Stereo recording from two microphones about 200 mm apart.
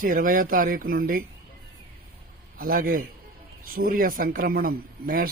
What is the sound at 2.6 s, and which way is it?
Speech, 45° right (ahead or behind).